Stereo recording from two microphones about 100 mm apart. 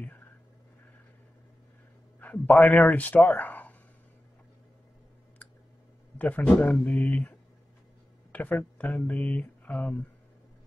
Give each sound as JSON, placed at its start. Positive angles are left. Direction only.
{"t": 2.1, "sound": "speech", "side_deg": 15}
{"t": 6.1, "sound": "speech", "side_deg": 15}